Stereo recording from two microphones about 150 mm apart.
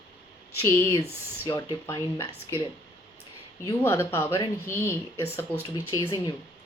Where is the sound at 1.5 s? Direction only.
25° left (ahead or behind).